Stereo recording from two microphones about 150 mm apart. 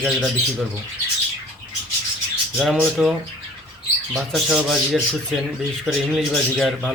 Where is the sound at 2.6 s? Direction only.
Centre (ahead or behind).